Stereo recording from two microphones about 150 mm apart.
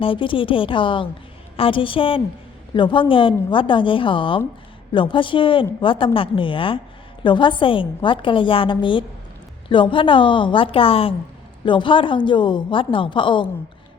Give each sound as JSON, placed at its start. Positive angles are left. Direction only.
{"t": 0.0, "sound": "a woman's voice", "side_deg": 35}